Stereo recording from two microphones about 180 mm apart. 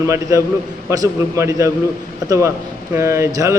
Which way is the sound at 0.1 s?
20° right (ahead or behind).